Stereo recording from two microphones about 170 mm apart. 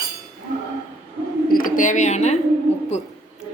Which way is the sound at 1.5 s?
50° left (ahead or behind).